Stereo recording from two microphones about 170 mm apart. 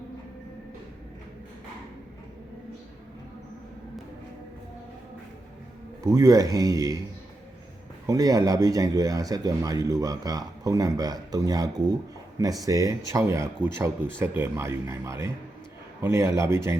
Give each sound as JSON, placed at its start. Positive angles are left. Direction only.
{"t": 6.0, "sound": "a man's voice", "side_deg": -20}
{"t": 8.0, "sound": "a man's voice", "side_deg": -20}